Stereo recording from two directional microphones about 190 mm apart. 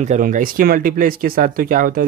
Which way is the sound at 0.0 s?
40° right (ahead or behind).